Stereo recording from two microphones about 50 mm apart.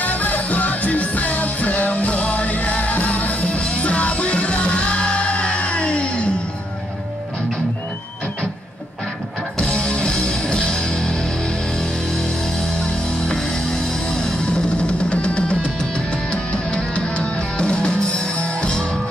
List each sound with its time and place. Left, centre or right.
0.0 s music: left
9.6 s music: centre